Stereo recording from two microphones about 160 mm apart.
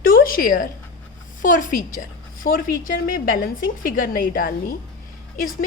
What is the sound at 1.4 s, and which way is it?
A woman's voice, 55° left (ahead or behind).